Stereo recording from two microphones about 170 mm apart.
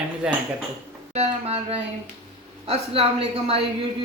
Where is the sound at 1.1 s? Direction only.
35° right (ahead or behind).